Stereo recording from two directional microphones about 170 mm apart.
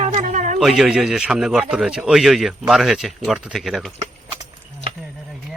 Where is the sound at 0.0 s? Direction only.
45° right (ahead or behind).